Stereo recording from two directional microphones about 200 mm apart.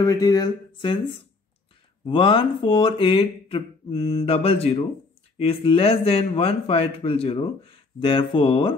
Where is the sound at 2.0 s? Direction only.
25° left (ahead or behind).